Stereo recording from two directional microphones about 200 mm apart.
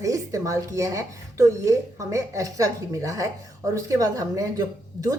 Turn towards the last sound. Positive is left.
turn(degrees=-15)  # may be behind; listen again after turning